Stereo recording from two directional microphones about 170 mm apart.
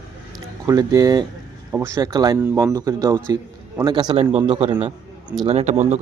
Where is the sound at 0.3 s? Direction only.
20° right (ahead or behind).